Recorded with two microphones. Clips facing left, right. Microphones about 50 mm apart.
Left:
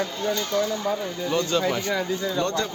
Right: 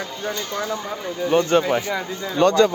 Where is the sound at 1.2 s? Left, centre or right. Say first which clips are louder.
Right 7 dB; right.